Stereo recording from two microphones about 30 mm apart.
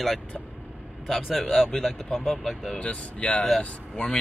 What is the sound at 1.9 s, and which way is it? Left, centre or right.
Speech, left.